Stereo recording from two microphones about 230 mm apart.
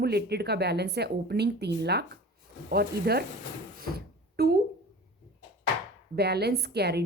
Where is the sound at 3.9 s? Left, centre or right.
Right.